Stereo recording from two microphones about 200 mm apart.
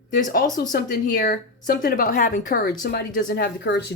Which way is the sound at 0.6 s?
45° left (ahead or behind).